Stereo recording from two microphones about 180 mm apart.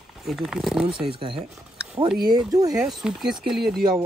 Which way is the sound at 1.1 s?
30° right (ahead or behind).